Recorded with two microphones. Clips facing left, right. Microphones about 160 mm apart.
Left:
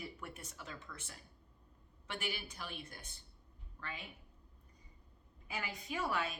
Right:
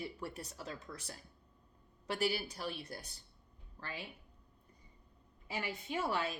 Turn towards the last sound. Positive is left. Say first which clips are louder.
# right 2 dB
turn(degrees=-30)  # may be behind; listen again after turning